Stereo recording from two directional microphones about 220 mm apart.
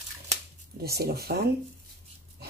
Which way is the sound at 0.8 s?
45° right (ahead or behind).